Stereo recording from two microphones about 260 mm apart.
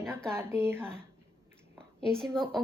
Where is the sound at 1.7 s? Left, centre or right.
Centre.